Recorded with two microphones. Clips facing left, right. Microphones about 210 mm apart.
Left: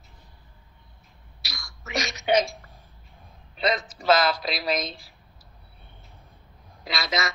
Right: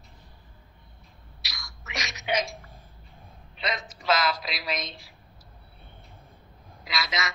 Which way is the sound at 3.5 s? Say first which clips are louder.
Left 7 dB; 35° left (ahead or behind).